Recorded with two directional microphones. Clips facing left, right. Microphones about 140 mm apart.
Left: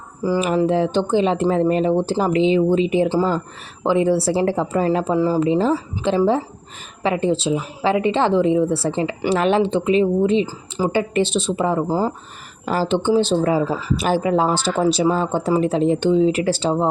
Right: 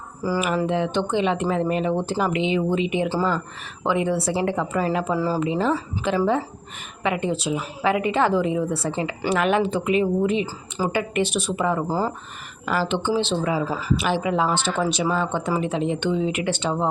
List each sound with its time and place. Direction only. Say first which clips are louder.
0.2 s a sound: left 4 dB; 20° left (ahead or behind)
0.4 s speech: left 6 dB; 30° left (ahead or behind)
5.1 s a woman's voice: left 5 dB; 20° left (ahead or behind)
5.4 s a woman's voice: left 5 dB; 30° left (ahead or behind)
11.9 s a woman's voice: left 4 dB; 20° left (ahead or behind)
12.6 s speech: left 4 dB; 35° left (ahead or behind)
13.7 s a woman's voice: left 3 dB; 30° left (ahead or behind)
13.9 s speech: left 3 dB; 40° left (ahead or behind)